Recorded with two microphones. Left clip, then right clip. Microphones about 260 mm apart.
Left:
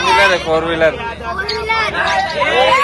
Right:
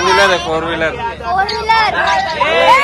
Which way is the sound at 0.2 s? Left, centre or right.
Centre.